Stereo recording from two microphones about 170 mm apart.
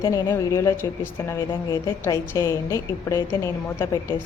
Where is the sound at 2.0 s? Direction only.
15° left (ahead or behind).